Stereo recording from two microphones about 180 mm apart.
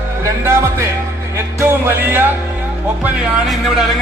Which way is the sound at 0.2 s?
15° right (ahead or behind).